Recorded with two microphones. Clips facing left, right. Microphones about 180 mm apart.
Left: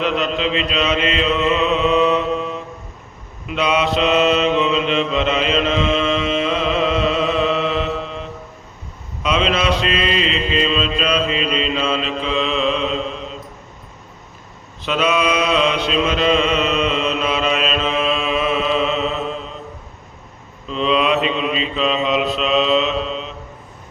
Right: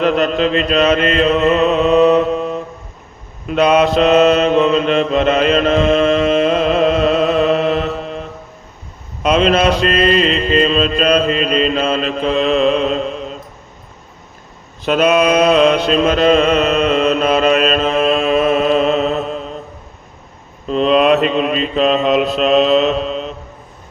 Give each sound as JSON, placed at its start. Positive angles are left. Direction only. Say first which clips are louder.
{"t": 0.0, "sound": "mantra", "louder": "right 6 dB", "side_deg": -45}
{"t": 14.8, "sound": "mantra", "louder": "right 6 dB", "side_deg": -45}
{"t": 20.7, "sound": "mantra", "louder": "right 6 dB", "side_deg": -50}